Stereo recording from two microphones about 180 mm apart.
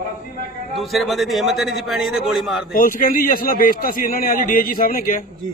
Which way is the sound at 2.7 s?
50° left (ahead or behind).